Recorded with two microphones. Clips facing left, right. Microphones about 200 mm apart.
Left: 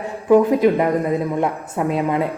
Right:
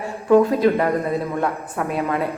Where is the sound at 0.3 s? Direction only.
15° left (ahead or behind).